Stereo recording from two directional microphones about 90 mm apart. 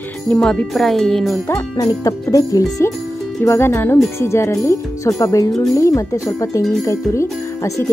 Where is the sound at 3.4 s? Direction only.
30° left (ahead or behind).